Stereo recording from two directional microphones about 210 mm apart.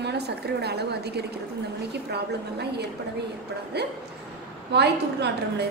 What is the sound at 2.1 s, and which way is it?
Speech, 50° right (ahead or behind).